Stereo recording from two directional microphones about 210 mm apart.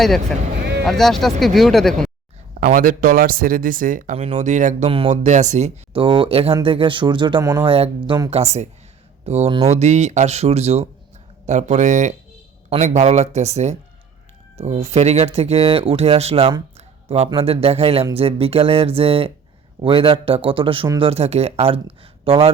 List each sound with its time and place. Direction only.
0.0 s speech: centre (ahead or behind)
2.6 s speech: 40° right (ahead or behind)